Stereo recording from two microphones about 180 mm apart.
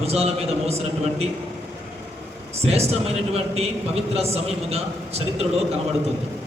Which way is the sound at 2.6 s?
35° right (ahead or behind).